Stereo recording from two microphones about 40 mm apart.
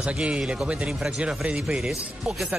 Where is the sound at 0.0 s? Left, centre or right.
Right.